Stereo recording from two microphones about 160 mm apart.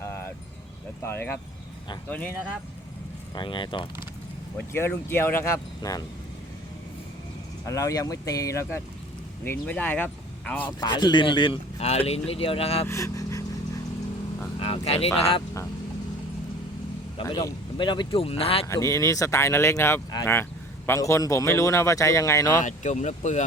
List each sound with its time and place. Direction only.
1.0 s speech: 15° left (ahead or behind)
3.3 s speech: 30° left (ahead or behind)
4.5 s speech: 10° left (ahead or behind)
7.6 s speech: 20° left (ahead or behind)
10.7 s speech: 25° left (ahead or behind)
12.9 s speech: 20° left (ahead or behind)
14.6 s speech: 35° left (ahead or behind)
17.2 s speech: 30° left (ahead or behind)
18.7 s speech: 20° left (ahead or behind)
22.6 s speech: 50° left (ahead or behind)